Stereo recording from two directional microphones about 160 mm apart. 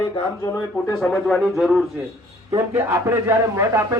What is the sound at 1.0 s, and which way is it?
Speech, centre (ahead or behind).